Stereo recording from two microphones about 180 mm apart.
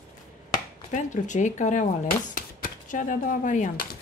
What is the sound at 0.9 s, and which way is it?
Speech, 45° left (ahead or behind).